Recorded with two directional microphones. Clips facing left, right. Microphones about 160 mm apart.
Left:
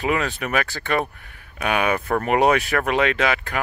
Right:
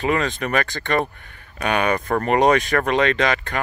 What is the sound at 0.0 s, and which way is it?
Speech, 5° left (ahead or behind).